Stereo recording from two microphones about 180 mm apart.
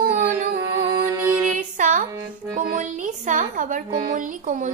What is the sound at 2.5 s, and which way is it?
Music, 50° right (ahead or behind).